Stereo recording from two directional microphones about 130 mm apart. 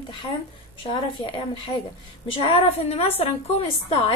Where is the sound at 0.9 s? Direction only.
35° left (ahead or behind).